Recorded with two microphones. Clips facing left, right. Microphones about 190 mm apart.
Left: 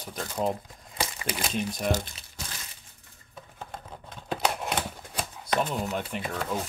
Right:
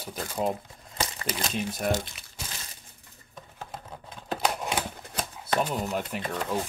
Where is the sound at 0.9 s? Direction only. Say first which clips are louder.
Even; 10° left (ahead or behind).